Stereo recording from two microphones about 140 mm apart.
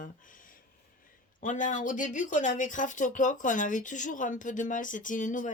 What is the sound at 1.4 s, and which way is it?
Speech, 65° left (ahead or behind).